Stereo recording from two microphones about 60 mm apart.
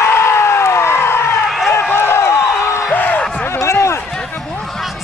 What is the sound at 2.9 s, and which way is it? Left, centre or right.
Music, left.